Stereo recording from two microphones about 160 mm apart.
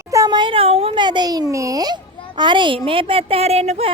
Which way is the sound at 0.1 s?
25° right (ahead or behind).